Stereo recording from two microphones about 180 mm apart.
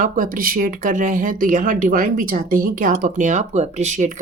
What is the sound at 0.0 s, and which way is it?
Speech, 50° right (ahead or behind).